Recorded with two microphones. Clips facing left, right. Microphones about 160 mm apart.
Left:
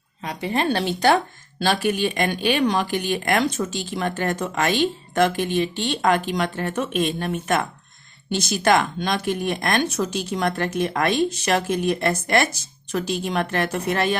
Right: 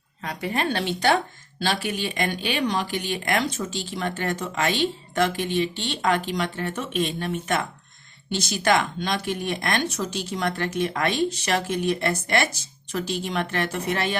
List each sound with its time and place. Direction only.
0.2 s speech: 25° left (ahead or behind); by 14.2 s 45° left (ahead or behind)